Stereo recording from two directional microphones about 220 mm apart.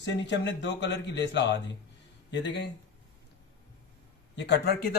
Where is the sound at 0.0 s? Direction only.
55° left (ahead or behind).